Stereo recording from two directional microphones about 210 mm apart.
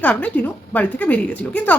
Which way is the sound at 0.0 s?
5° left (ahead or behind).